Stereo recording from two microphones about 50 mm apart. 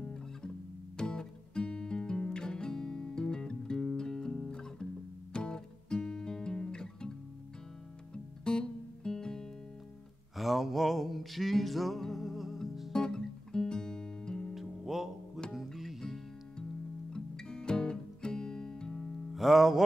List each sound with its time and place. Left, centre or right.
0.0 s music: centre
8.1 s music: centre
10.3 s music: centre
12.9 s music: centre
14.5 s music: centre
17.1 s music: centre
19.3 s music: centre